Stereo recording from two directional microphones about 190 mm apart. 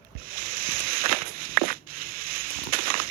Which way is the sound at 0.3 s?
50° right (ahead or behind).